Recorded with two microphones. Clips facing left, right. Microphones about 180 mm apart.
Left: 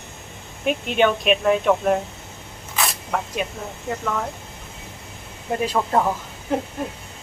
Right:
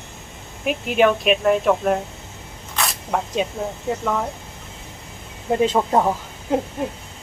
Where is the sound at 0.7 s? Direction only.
Centre (ahead or behind).